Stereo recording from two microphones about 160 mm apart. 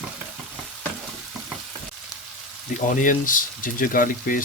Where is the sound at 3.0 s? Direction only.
55° left (ahead or behind).